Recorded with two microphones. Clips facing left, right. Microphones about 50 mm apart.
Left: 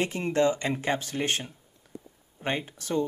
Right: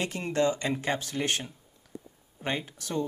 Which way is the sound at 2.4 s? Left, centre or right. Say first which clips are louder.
Left 2 dB; left.